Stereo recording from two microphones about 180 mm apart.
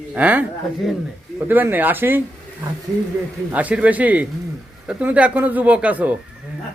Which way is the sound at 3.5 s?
10° right (ahead or behind).